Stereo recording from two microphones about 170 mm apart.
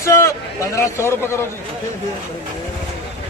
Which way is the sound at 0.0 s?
15° left (ahead or behind).